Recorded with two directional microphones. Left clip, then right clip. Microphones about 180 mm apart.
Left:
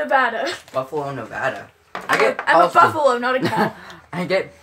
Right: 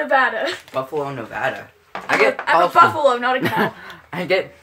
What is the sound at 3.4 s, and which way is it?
Speech, 5° right (ahead or behind).